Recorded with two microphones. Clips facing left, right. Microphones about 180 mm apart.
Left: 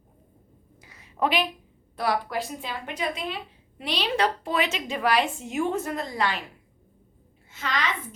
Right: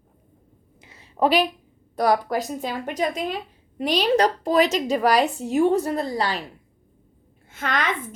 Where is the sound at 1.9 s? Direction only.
40° right (ahead or behind).